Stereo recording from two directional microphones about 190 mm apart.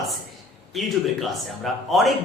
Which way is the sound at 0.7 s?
Centre (ahead or behind).